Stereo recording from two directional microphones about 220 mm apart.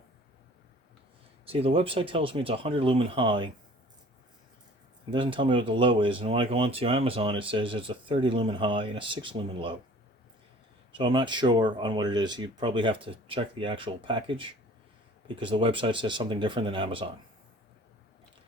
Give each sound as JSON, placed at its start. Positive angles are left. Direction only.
{"t": 1.5, "sound": "speech", "side_deg": -25}
{"t": 5.1, "sound": "speech", "side_deg": -25}
{"t": 10.9, "sound": "speech", "side_deg": -20}